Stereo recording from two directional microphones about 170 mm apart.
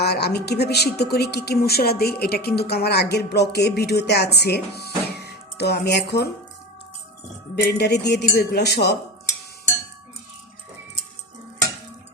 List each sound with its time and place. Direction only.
0.0 s speech: 75° left (ahead or behind)
7.5 s speech: 75° left (ahead or behind)